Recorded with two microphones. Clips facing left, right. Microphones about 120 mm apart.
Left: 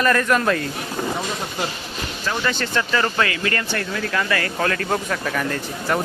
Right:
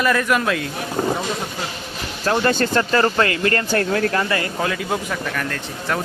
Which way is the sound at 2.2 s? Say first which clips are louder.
Right 6 dB; 50° right (ahead or behind).